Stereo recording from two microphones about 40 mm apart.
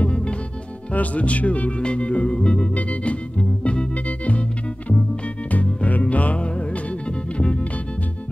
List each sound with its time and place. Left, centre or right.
0.0 s music: left
0.9 s speech: left
1.8 s organ: left
2.7 s music: left
5.9 s music: left